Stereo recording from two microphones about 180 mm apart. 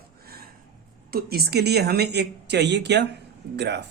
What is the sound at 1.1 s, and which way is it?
Speech, 60° right (ahead or behind).